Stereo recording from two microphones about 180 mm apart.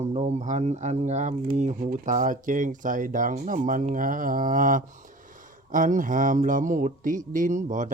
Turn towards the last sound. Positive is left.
turn(degrees=-45)  # may be behind; listen again after turning